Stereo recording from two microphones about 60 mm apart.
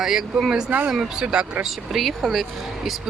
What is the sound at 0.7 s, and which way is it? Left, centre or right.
Speech, right.